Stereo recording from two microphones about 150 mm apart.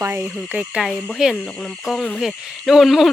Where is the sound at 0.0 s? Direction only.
15° right (ahead or behind).